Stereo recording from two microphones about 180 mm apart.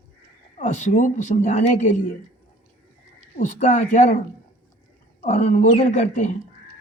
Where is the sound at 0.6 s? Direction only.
40° left (ahead or behind).